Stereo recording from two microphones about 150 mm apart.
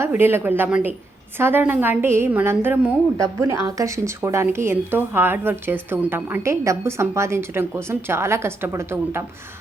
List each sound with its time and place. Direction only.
0.0 s a woman's voice: 15° right (ahead or behind)